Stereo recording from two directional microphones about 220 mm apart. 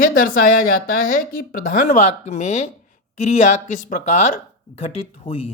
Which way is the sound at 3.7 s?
30° left (ahead or behind).